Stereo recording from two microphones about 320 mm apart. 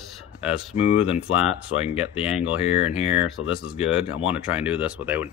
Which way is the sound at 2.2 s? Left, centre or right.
Centre.